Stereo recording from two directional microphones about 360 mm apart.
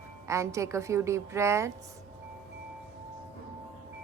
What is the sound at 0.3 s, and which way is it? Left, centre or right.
A woman's voice, centre.